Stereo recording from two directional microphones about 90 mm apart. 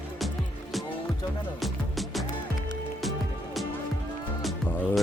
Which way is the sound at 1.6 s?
Centre (ahead or behind).